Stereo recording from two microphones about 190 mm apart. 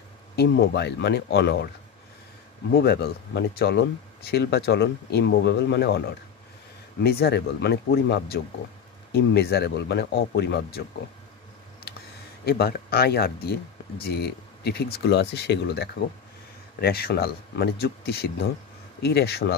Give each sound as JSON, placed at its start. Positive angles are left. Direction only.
{"t": 0.4, "sound": "speech", "side_deg": 60}
{"t": 2.7, "sound": "speech", "side_deg": 55}
{"t": 12.4, "sound": "speech", "side_deg": 55}